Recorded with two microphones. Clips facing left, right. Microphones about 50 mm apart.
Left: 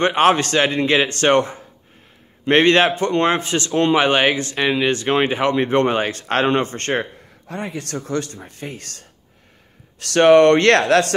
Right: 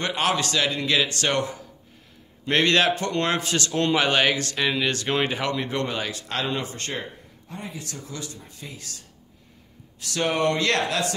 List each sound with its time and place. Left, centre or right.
0.0 s a man's voice: left
9.9 s speech: left